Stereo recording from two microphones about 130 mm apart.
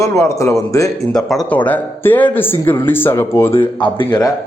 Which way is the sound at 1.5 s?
10° left (ahead or behind).